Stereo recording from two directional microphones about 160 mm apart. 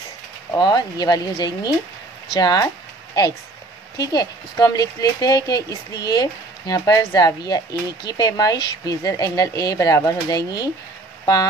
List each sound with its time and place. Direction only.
0.5 s speech: 25° left (ahead or behind)
4.0 s speech: 25° left (ahead or behind)